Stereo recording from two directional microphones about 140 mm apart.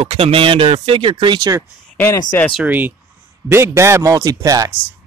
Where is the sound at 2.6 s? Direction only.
15° right (ahead or behind).